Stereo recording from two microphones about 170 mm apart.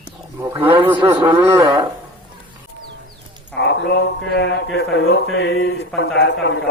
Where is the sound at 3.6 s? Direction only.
90° left.